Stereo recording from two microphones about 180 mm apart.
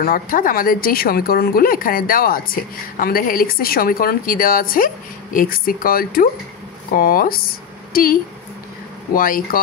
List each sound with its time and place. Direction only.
0.0 s a woman's voice: 50° left (ahead or behind)